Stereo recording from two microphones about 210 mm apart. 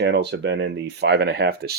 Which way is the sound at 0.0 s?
55° right (ahead or behind).